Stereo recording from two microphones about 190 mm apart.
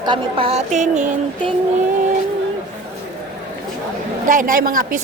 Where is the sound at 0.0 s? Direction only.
25° right (ahead or behind).